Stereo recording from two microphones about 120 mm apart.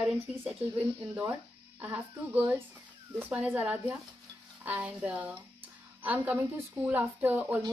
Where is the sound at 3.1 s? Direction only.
15° right (ahead or behind).